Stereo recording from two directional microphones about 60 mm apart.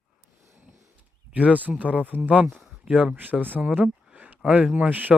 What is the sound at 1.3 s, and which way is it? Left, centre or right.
Speech, right.